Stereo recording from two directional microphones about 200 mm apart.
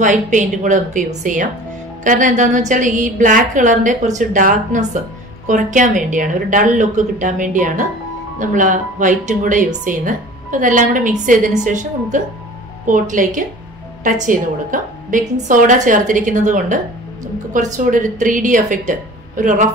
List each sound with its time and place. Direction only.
0.0 s a woman's voice: 40° right (ahead or behind)